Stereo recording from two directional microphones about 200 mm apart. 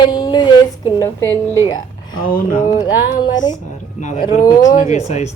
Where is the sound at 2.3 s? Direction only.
45° left (ahead or behind).